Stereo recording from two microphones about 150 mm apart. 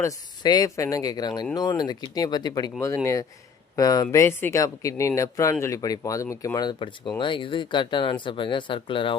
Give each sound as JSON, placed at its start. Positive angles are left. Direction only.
{"t": 0.0, "sound": "speech", "side_deg": 25}